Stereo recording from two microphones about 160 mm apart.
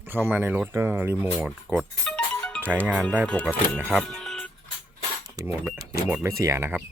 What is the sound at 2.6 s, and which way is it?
Speech, 10° right (ahead or behind).